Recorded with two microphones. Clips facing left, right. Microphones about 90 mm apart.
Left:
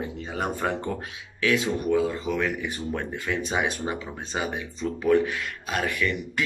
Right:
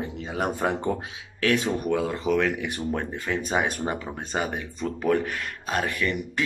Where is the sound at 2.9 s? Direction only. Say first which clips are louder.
Right 1 dB; 35° right (ahead or behind).